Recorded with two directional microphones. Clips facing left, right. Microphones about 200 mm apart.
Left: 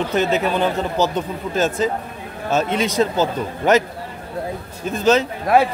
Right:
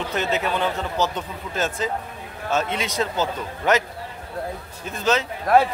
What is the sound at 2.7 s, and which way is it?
Speech, 45° left (ahead or behind).